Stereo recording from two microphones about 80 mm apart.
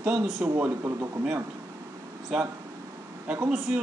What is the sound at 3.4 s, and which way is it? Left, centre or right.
Speech, centre.